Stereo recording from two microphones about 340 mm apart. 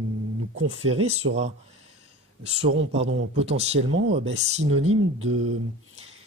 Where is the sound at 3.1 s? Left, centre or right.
Right.